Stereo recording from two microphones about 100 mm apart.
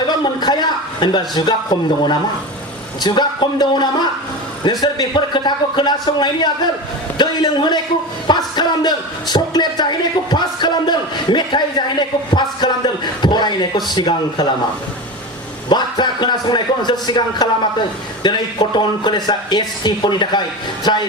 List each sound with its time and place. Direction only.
0.3 s a woman's voice: 45° left (ahead or behind)
15.7 s a woman's voice: 50° left (ahead or behind)